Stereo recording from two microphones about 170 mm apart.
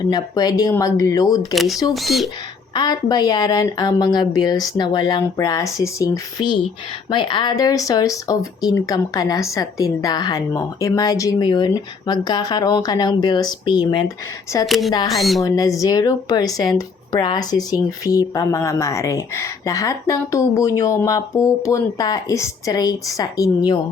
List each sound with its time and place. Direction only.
0.0 s speech: 25° left (ahead or behind)
1.5 s speech: centre (ahead or behind)
2.7 s speech: 25° left (ahead or behind)
14.7 s speech: centre (ahead or behind)
15.4 s speech: 20° left (ahead or behind)